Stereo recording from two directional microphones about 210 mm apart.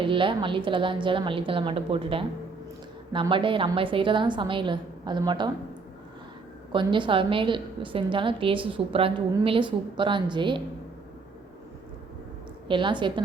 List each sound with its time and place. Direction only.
0.0 s a woman's voice: 25° right (ahead or behind)
6.7 s a woman's voice: 25° right (ahead or behind)
12.6 s a woman's voice: 25° right (ahead or behind)